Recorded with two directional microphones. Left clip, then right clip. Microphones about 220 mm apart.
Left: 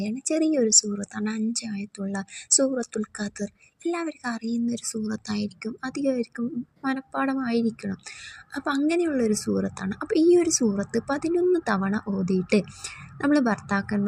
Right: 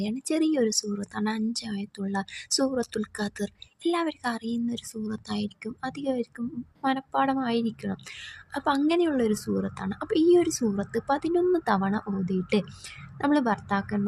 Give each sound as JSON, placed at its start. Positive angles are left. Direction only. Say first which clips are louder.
{"t": 0.0, "sound": "a woman's voice", "louder": "left 2 dB", "side_deg": -5}